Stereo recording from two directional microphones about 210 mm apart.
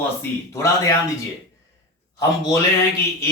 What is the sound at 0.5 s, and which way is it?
Speech, 15° left (ahead or behind).